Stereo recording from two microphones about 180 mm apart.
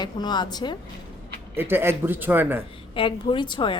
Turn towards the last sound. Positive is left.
turn(degrees=25)  # may be behind; listen again after turning